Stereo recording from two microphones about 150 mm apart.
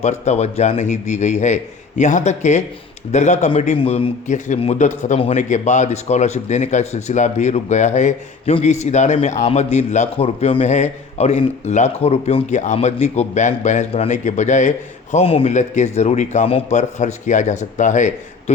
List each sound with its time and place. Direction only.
0.0 s a man's voice: 50° left (ahead or behind)
3.8 s a man's voice: 40° left (ahead or behind)
15.1 s a man's voice: 40° left (ahead or behind)